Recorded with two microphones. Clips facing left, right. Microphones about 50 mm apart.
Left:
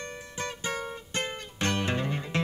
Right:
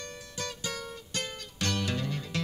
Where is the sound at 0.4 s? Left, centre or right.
Left.